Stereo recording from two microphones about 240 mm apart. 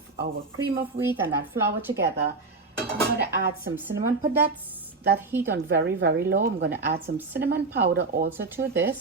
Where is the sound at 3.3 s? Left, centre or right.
Right.